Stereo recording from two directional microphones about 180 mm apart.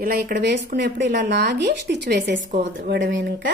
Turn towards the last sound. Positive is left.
turn(degrees=-85)